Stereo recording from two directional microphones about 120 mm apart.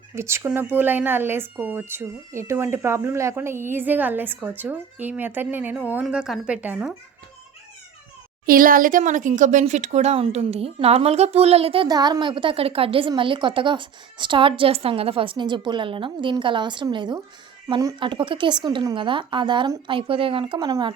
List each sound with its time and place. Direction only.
0.2 s speech: 20° right (ahead or behind)
9.0 s speech: 90° right; by 11.9 s 50° right (ahead or behind)
11.9 s a woman's voice: 35° right (ahead or behind)
20.7 s speech: 30° right (ahead or behind)